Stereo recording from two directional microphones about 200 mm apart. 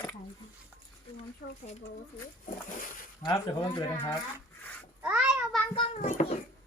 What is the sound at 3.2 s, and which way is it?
Speech, 20° left (ahead or behind).